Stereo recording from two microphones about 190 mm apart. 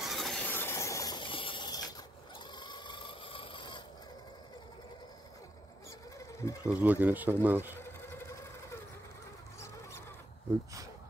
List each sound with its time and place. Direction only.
0.0 s hiss: centre (ahead or behind); by 3.8 s 25° left (ahead or behind)
6.1 s mechanisms: 15° left (ahead or behind)
6.7 s speech: 10° right (ahead or behind)